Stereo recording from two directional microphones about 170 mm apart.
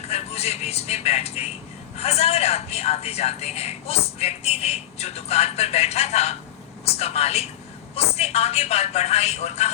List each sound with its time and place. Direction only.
0.1 s a man's voice: 35° left (ahead or behind)